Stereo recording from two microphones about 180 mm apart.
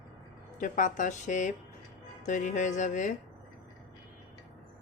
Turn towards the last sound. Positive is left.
turn(degrees=45)  # may be behind; listen again after turning